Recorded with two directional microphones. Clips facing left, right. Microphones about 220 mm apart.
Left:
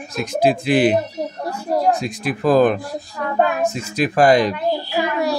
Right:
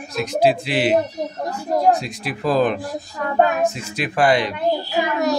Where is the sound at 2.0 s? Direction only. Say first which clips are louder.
Left 4 dB; 50° left (ahead or behind).